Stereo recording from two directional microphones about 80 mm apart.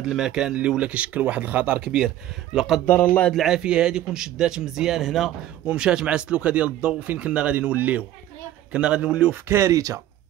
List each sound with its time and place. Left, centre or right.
0.0 s speech: centre
2.9 s speech: left
3.4 s speech: centre
5.7 s speech: centre
9.5 s speech: right